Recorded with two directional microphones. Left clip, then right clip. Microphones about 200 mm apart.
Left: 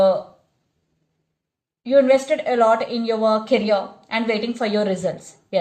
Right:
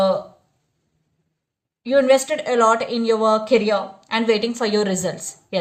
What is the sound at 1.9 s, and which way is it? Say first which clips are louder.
A woman's voice: left 1 dB; 40° right (ahead or behind).